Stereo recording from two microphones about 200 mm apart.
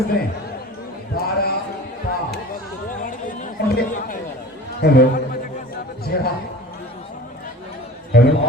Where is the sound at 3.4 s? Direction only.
45° left (ahead or behind).